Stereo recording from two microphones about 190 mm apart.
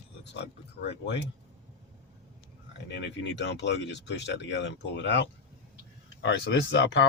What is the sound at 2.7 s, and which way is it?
Speech, 65° left (ahead or behind).